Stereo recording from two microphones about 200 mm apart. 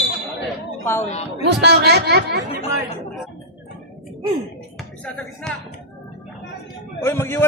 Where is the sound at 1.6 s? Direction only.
55° right (ahead or behind).